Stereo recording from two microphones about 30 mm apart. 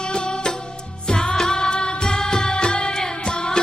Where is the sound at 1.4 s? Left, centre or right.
Left.